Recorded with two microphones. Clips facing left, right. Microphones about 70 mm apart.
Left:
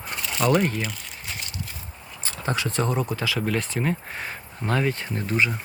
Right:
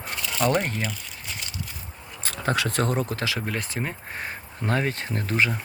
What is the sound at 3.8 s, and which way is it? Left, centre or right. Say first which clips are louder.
Speech: left 5 dB; centre.